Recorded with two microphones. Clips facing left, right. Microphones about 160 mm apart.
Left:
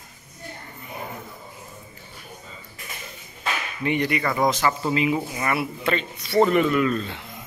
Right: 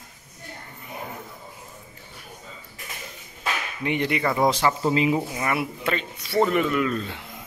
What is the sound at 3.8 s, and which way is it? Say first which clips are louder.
A man's voice: left 1 dB; 20° right (ahead or behind).